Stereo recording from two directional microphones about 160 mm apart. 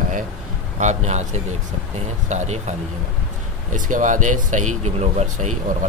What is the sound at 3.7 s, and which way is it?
Speech, 55° right (ahead or behind).